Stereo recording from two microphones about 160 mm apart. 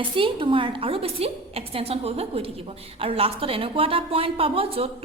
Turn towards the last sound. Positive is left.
turn(degrees=-35)  # may be behind; listen again after turning